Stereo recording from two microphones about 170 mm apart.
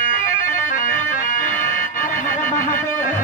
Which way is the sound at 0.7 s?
50° left (ahead or behind).